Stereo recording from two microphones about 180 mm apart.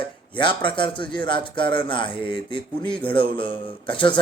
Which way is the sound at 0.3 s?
25° left (ahead or behind).